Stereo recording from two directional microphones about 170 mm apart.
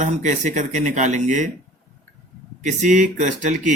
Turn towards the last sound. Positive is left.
turn(degrees=-45)  # may be behind; listen again after turning